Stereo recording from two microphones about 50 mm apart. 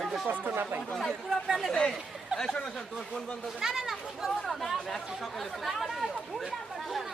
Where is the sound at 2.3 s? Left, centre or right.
Centre.